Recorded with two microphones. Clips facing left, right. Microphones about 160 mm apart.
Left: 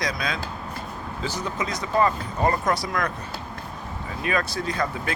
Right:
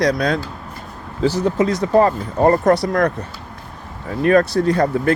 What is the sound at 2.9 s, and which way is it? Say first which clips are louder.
Speech: right 9 dB; 40° right (ahead or behind).